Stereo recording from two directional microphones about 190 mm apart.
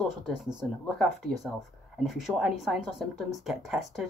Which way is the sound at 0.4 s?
5° right (ahead or behind).